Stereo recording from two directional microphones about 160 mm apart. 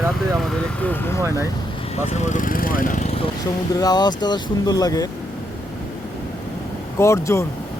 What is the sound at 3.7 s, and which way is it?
Speech, 25° left (ahead or behind).